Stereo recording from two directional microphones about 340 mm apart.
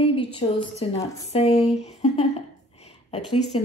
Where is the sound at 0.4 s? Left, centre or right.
Centre.